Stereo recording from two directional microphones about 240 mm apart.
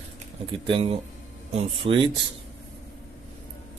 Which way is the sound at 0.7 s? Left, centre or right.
Right.